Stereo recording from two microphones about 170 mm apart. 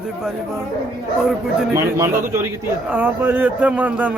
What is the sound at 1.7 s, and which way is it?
Speech, 15° right (ahead or behind).